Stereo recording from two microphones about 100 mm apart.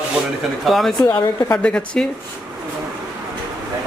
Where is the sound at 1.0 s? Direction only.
45° left (ahead or behind).